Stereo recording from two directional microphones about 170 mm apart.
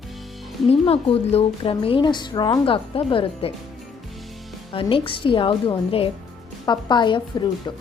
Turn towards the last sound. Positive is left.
turn(degrees=25)  # may be behind; listen again after turning